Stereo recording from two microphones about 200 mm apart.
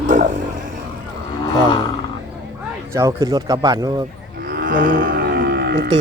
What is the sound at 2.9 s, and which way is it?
Speech, 15° right (ahead or behind).